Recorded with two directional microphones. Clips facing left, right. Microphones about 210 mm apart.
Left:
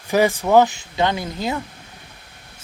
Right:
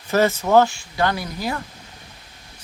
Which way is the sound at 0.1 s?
15° left (ahead or behind).